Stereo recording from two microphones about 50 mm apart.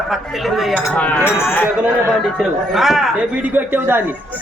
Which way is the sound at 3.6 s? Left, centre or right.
Right.